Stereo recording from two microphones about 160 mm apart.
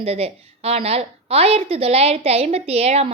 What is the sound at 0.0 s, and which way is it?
A woman's voice, 40° right (ahead or behind).